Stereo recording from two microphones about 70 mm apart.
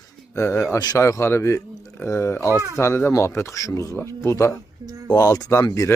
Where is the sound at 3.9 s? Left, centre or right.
Left.